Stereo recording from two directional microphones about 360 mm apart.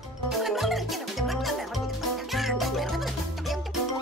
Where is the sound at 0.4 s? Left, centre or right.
Centre.